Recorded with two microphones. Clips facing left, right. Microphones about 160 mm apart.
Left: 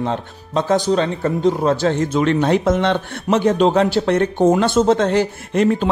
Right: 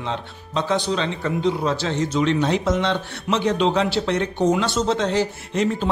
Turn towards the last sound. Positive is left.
turn(degrees=55)  # may be behind; listen again after turning